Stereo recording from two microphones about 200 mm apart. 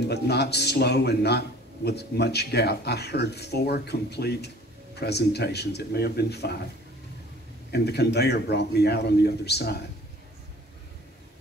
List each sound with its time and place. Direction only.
0.1 s speech: 55° left (ahead or behind)
7.7 s speech: 55° left (ahead or behind)